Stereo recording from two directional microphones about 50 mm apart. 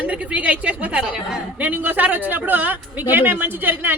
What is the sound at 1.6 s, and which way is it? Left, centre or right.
Speech, right.